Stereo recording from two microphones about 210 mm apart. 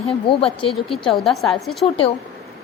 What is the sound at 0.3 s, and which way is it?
Speech, 25° left (ahead or behind).